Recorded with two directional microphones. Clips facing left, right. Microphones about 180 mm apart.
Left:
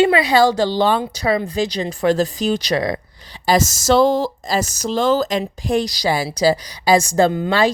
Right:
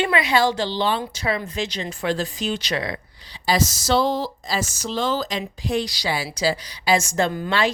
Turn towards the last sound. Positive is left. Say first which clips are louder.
# left 6 dB
turn(degrees=40)  # may be behind; listen again after turning